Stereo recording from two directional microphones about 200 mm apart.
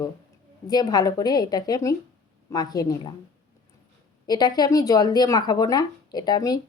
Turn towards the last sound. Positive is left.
turn(degrees=20)  # may be behind; listen again after turning